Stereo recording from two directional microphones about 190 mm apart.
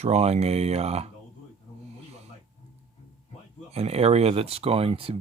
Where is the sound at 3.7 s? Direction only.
30° right (ahead or behind).